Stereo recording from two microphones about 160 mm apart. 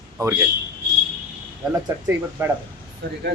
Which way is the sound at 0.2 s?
20° right (ahead or behind).